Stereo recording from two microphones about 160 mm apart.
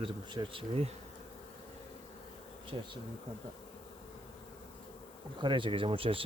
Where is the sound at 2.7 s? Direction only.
30° right (ahead or behind).